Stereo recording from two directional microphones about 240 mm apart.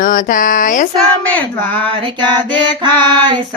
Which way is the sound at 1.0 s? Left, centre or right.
Centre.